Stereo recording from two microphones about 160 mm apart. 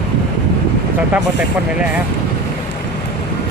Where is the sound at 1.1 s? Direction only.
10° right (ahead or behind).